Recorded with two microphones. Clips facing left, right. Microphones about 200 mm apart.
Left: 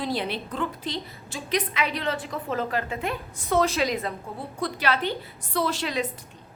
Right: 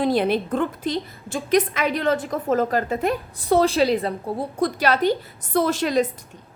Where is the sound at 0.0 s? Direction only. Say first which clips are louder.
Right 9 dB; 50° right (ahead or behind).